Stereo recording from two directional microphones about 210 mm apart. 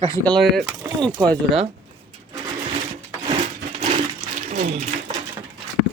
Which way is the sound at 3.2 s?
30° right (ahead or behind).